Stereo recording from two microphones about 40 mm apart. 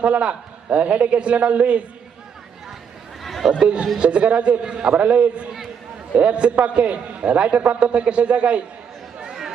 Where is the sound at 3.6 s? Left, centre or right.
Right.